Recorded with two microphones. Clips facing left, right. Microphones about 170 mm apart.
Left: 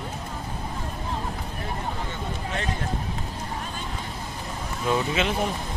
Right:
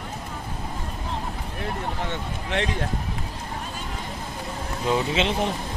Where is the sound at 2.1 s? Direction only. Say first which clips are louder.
Right 2 dB; 85° right.